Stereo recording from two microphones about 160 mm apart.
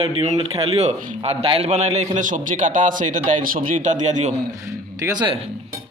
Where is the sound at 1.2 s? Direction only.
40° right (ahead or behind).